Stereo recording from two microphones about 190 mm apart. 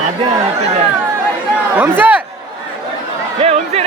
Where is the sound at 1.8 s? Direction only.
10° right (ahead or behind).